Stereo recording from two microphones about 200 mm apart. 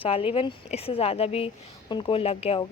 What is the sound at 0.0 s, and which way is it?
A woman's voice, 25° left (ahead or behind).